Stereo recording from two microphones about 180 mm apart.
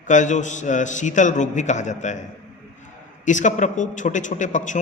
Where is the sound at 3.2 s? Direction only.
45° left (ahead or behind).